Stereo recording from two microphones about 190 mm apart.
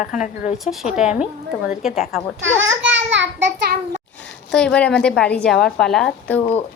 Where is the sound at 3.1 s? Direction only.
70° right (ahead or behind).